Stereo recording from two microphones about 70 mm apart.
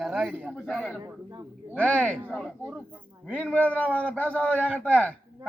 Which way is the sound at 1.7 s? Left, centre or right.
Centre.